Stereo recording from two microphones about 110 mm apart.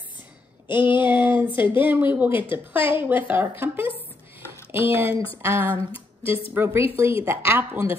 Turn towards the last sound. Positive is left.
turn(degrees=-20)  # may be behind; listen again after turning